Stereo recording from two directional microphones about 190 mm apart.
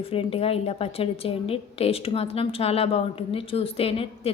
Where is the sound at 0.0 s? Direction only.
30° left (ahead or behind).